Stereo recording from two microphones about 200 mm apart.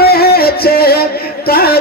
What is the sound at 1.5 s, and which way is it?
Music, 50° left (ahead or behind).